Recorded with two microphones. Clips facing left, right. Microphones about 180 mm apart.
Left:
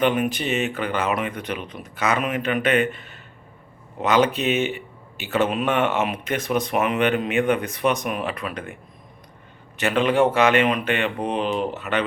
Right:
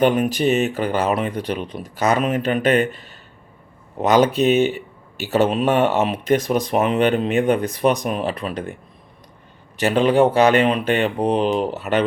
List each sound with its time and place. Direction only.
0.0 s speech: 40° right (ahead or behind)
9.7 s speech: 35° right (ahead or behind)